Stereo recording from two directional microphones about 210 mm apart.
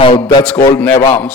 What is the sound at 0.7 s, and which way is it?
Speech, 10° left (ahead or behind).